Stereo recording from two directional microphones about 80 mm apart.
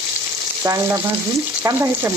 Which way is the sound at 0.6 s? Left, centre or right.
Right.